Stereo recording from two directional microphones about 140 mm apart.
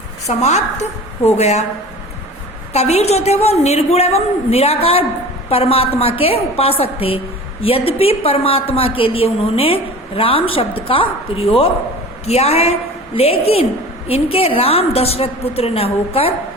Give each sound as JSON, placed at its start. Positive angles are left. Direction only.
{"t": 0.3, "sound": "a woman's voice", "side_deg": 50}
{"t": 2.7, "sound": "a woman's voice", "side_deg": 50}